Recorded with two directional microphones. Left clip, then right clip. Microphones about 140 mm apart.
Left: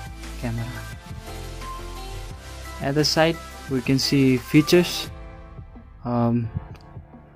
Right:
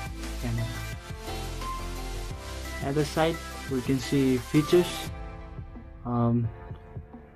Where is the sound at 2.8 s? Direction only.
90° left.